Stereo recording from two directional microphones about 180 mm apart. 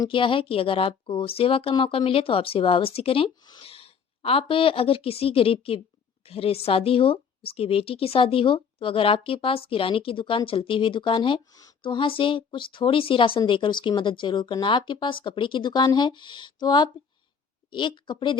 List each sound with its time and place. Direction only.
0.0 s a woman's voice: 30° left (ahead or behind)